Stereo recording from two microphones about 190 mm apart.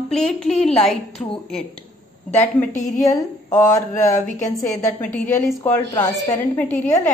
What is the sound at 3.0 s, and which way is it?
Speech, 20° left (ahead or behind).